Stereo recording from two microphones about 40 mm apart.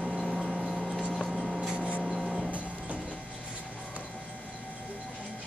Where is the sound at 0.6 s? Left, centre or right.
Centre.